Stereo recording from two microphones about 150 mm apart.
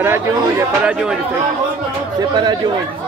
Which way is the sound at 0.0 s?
15° right (ahead or behind).